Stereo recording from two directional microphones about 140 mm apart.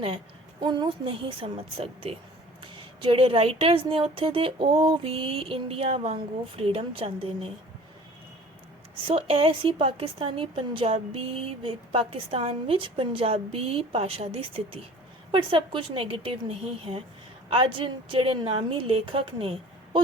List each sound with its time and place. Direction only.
0.6 s a woman's voice: 35° right (ahead or behind)
9.0 s a woman's voice: 45° right (ahead or behind)